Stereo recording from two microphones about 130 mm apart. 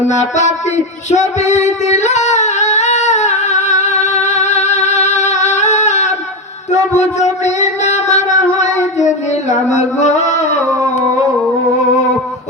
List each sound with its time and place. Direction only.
0.1 s music: 65° left (ahead or behind)
1.1 s singing: 60° left (ahead or behind)
6.9 s music: 60° left (ahead or behind)
8.8 s singing: 65° left (ahead or behind)